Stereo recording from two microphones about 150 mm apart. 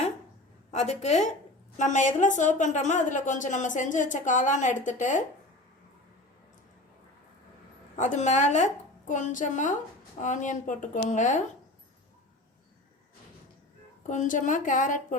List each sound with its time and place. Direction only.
0.7 s a woman's voice: 50° left (ahead or behind)
7.9 s a woman's voice: 55° left (ahead or behind)
14.1 s a woman's voice: 55° left (ahead or behind)